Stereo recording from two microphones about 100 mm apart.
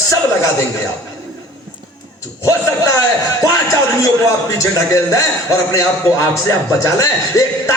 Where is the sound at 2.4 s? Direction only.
30° left (ahead or behind).